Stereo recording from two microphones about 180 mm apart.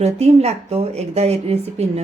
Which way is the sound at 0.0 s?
35° right (ahead or behind).